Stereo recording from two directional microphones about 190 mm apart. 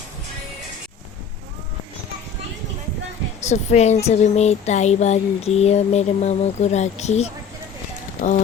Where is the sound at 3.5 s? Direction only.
35° left (ahead or behind).